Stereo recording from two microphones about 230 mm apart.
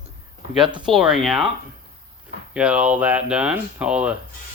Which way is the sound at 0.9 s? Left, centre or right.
Centre.